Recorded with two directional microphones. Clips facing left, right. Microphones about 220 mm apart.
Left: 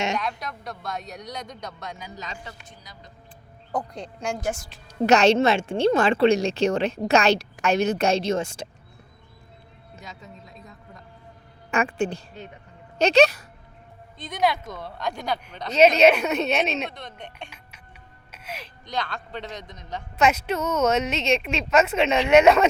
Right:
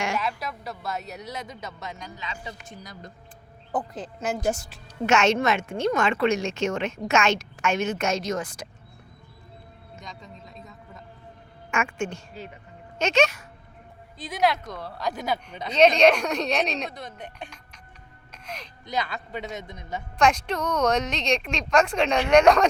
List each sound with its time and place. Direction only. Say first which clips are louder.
0.2 s a woman's voice: right 1 dB; 5° right (ahead or behind)
2.1 s a woman's voice: left 1 dB; 40° left (ahead or behind)
2.6 s a woman's voice: right 6 dB; 50° right (ahead or behind)
3.7 s a woman's voice: even; 5° right (ahead or behind)
5.0 s a woman's voice: left 4 dB; 35° left (ahead or behind)
10.0 s a sound: left 1 dB; 5° left (ahead or behind)
11.7 s a woman's voice: left 4 dB; 35° left (ahead or behind)
14.2 s a woman's voice: even; 5° right (ahead or behind)
18.3 s music: left 1 dB; 5° left (ahead or behind)
18.9 s a man's voice: right 1 dB; 5° right (ahead or behind)
20.1 s a woman's voice: left 1 dB; 5° left (ahead or behind)